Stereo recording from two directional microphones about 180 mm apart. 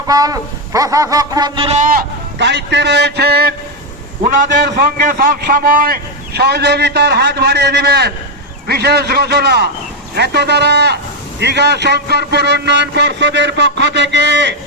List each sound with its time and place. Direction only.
0.1 s speech: 20° right (ahead or behind)
1.8 s speech: 50° right (ahead or behind)
2.4 s speech: 75° right (ahead or behind)
5.0 s a man's voice: 50° right (ahead or behind); by 14.5 s 75° right (ahead or behind)